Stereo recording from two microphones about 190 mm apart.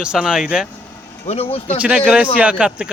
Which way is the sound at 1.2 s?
30° left (ahead or behind).